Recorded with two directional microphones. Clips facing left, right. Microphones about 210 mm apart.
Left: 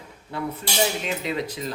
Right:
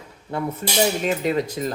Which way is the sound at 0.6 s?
50° right (ahead or behind).